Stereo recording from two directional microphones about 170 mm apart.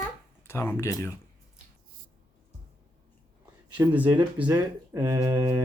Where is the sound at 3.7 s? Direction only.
10° right (ahead or behind).